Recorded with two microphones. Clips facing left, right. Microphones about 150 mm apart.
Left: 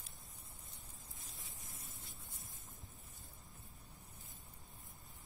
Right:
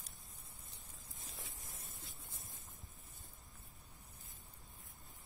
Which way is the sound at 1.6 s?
Centre (ahead or behind).